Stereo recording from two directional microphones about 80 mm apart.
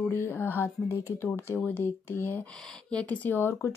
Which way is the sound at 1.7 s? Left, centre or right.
Left.